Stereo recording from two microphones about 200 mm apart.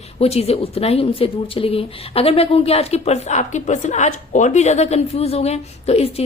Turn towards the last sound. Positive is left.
turn(degrees=30)  # may be behind; listen again after turning